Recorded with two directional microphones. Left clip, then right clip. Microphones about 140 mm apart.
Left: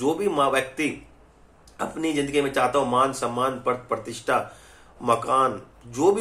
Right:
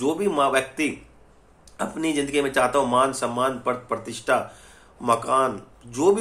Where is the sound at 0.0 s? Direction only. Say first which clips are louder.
Even; 10° right (ahead or behind).